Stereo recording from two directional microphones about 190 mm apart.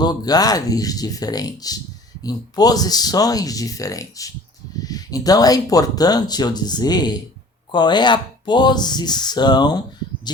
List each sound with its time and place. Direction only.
0.0 s speech: 20° left (ahead or behind)